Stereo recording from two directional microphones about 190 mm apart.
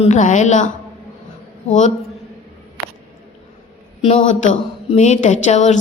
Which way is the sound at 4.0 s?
40° left (ahead or behind).